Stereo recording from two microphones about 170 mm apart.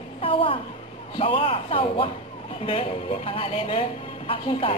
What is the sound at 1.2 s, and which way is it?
A woman's voice, 30° left (ahead or behind).